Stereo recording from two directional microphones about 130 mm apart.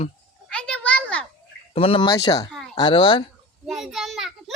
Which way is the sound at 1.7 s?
45° left (ahead or behind).